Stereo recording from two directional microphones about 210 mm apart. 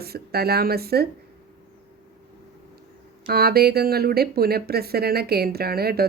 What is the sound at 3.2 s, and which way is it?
Speech, 50° right (ahead or behind).